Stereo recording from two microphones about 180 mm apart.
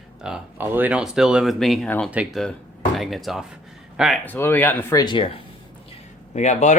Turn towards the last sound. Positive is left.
turn(degrees=40)  # may be behind; listen again after turning